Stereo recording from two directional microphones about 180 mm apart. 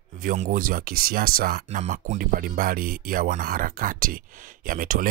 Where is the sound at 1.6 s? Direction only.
40° right (ahead or behind).